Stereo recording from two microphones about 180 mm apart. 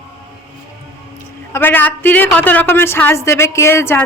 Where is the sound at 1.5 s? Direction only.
10° left (ahead or behind).